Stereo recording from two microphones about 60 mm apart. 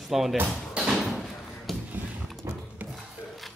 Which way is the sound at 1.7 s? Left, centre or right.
Centre.